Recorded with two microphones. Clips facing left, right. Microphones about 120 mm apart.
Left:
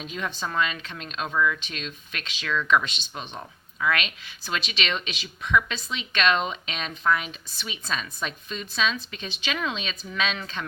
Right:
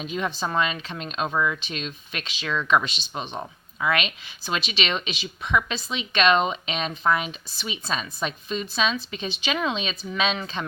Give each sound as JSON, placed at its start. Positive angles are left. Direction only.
{"t": 0.0, "sound": "speech", "side_deg": -20}